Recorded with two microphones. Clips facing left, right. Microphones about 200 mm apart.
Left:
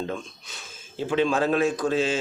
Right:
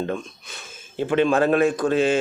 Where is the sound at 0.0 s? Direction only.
55° right (ahead or behind).